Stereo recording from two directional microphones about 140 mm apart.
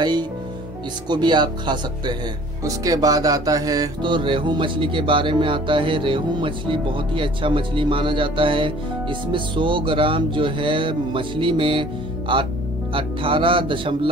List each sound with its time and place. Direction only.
0.0 s music: 30° right (ahead or behind)